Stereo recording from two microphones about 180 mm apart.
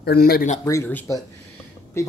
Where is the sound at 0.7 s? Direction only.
15° left (ahead or behind).